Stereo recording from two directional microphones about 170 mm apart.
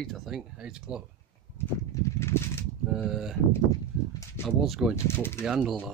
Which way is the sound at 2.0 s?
15° left (ahead or behind).